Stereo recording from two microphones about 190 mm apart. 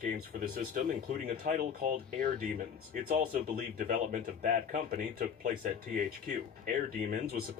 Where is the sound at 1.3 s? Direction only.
45° right (ahead or behind).